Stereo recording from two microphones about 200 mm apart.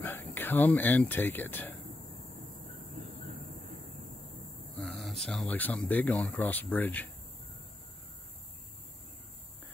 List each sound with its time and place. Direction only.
0.0 s speech: 10° left (ahead or behind)
4.7 s speech: centre (ahead or behind)